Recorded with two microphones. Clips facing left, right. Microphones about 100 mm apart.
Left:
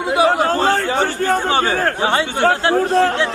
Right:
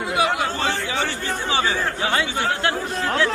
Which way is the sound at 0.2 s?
35° left (ahead or behind).